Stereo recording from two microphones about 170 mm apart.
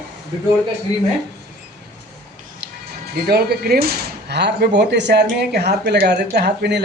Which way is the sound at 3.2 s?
65° right (ahead or behind).